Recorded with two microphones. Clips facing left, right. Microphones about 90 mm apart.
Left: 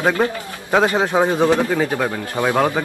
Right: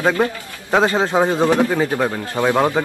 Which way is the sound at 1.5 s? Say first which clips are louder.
Right 1 dB; 15° right (ahead or behind).